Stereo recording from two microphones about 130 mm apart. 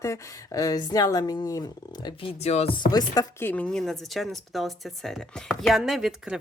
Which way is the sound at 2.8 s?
30° left (ahead or behind).